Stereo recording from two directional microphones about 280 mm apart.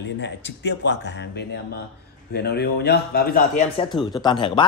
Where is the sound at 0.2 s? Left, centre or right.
Left.